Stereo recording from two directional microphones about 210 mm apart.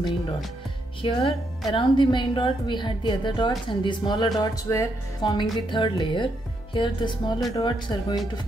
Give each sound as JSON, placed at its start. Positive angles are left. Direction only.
{"t": 1.0, "sound": "speech", "side_deg": 25}